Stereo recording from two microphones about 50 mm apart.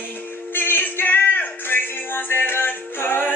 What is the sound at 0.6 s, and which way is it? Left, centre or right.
Music, left.